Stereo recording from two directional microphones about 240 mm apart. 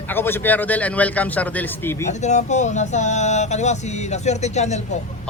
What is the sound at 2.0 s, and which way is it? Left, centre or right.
Speech, left.